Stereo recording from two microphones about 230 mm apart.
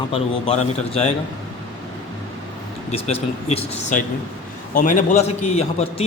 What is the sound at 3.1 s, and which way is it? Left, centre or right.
A man's voice, left.